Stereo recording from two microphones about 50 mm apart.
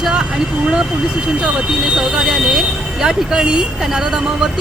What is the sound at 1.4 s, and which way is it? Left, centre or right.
Speech, centre.